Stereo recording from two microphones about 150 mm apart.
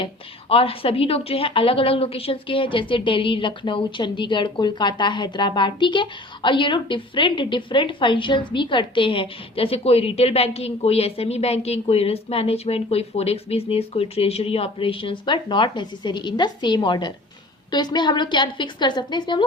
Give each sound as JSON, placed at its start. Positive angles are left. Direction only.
{"t": 0.0, "sound": "a woman's voice", "side_deg": 40}